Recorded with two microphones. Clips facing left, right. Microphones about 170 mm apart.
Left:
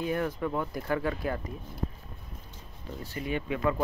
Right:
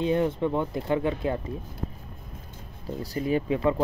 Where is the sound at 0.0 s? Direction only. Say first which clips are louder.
Right 6 dB; 25° right (ahead or behind).